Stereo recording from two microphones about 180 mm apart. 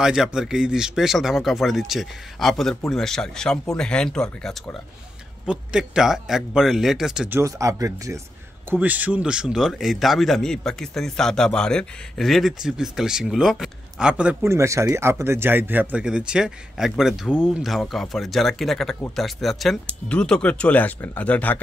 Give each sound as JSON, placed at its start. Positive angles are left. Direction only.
{"t": 0.0, "sound": "a man's voice", "side_deg": -5}
{"t": 7.3, "sound": "a man's voice", "side_deg": -15}